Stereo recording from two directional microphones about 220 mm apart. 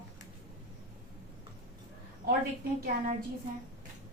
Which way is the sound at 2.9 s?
45° right (ahead or behind).